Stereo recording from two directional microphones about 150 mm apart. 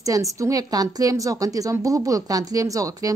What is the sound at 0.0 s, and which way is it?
A woman's voice, 20° right (ahead or behind).